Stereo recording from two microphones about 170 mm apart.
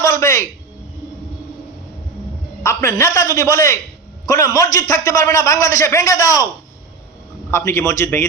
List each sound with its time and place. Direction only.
0.0 s a sound: 15° left (ahead or behind)
2.6 s a man's voice: 15° left (ahead or behind)
7.5 s a man's voice: 15° left (ahead or behind)